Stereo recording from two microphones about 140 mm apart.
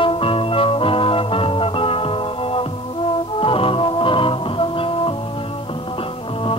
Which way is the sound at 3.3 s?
40° left (ahead or behind).